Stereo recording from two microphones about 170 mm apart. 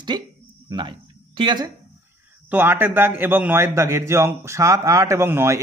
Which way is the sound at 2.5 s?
10° right (ahead or behind).